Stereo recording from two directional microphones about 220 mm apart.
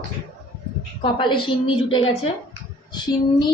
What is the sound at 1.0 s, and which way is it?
A woman's voice, 20° left (ahead or behind).